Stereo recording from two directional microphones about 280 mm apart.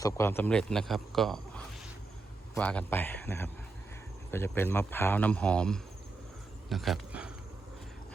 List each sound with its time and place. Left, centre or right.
0.0 s a man's voice: centre